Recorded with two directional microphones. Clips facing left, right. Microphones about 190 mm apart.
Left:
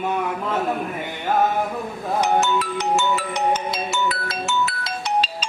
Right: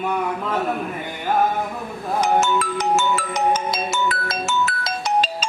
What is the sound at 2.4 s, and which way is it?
Ringtone, 45° right (ahead or behind).